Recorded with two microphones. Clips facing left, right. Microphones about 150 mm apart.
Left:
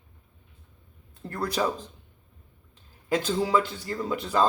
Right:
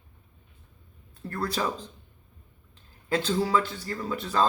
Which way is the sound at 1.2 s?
15° left (ahead or behind).